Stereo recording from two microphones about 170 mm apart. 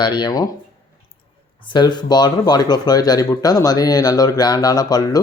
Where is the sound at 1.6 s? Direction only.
25° left (ahead or behind).